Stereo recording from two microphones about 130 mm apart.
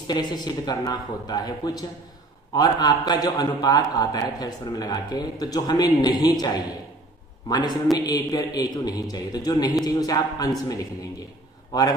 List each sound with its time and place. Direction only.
0.0 s a man's voice: 35° left (ahead or behind)
7.4 s a man's voice: 30° left (ahead or behind)
9.8 s a capella: 30° left (ahead or behind)
11.7 s a capella: 30° left (ahead or behind)